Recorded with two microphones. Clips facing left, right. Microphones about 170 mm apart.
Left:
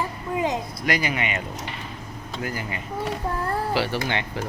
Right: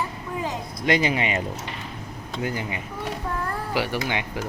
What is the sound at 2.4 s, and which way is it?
Speech, 20° right (ahead or behind).